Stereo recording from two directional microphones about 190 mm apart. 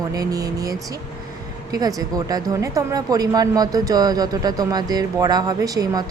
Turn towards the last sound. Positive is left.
turn(degrees=-20)  # may be behind; listen again after turning